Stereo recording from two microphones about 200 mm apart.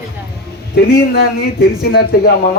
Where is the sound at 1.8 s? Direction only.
55° left (ahead or behind).